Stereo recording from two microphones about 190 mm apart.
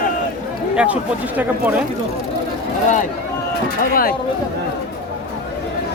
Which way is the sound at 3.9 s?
50° left (ahead or behind).